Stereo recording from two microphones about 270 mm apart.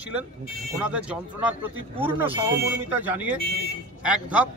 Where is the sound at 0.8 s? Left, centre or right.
Centre.